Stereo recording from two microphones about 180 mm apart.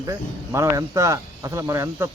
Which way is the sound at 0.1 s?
15° right (ahead or behind).